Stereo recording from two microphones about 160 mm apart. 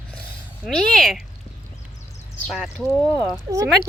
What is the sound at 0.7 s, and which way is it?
Speech, centre (ahead or behind).